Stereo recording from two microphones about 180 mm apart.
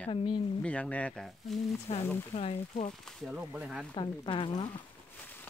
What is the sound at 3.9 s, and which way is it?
Speech, 25° left (ahead or behind).